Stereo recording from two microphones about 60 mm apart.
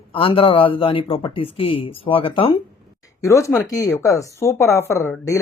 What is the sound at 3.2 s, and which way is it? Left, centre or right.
A woman's voice, left.